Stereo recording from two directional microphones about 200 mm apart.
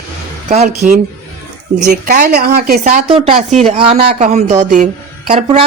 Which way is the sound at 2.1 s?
45° right (ahead or behind).